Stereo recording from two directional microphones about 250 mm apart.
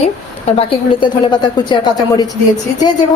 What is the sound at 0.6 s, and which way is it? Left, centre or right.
Speech, left.